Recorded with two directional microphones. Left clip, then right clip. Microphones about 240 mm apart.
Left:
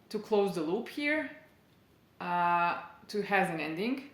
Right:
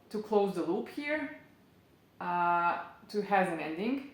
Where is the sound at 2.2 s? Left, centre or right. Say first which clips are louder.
Left 1 dB; left.